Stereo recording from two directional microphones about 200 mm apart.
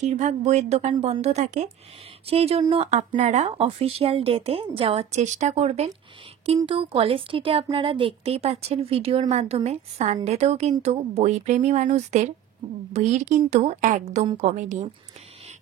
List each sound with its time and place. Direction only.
0.0 s speech: 35° right (ahead or behind)